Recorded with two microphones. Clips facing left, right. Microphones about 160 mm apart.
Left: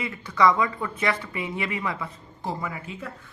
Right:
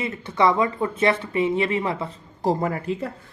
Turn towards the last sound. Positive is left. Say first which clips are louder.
# right 9 dB
turn(degrees=-45)  # may be behind; listen again after turning